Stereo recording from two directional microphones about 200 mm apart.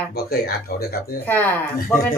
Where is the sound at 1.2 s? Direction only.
10° left (ahead or behind).